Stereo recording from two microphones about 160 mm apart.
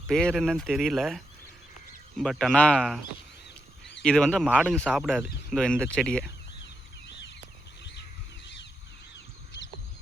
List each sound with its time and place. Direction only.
0.1 s speech: 5° left (ahead or behind)
4.0 s speech: 5° left (ahead or behind)